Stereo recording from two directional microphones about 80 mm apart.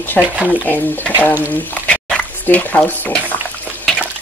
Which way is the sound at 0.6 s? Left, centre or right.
Left.